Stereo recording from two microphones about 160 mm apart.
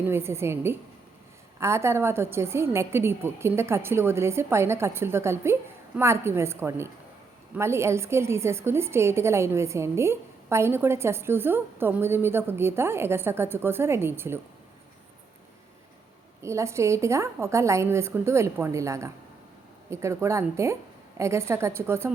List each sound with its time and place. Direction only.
0.0 s a woman's voice: 15° right (ahead or behind)
16.4 s a woman's voice: 20° right (ahead or behind)